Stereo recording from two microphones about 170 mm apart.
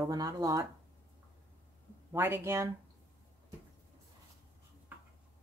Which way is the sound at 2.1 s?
15° right (ahead or behind).